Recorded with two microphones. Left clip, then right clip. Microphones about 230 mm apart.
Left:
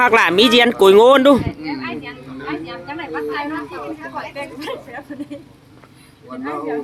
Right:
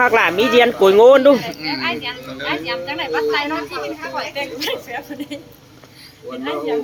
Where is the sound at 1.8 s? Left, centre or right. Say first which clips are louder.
Right 6 dB; centre.